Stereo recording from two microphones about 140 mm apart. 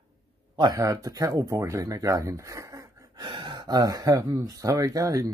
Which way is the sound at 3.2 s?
35° right (ahead or behind).